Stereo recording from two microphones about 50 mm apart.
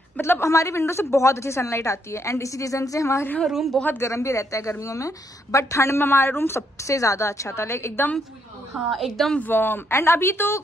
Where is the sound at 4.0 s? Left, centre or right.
Left.